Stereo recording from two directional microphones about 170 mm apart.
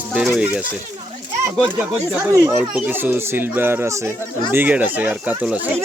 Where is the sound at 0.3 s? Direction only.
5° right (ahead or behind).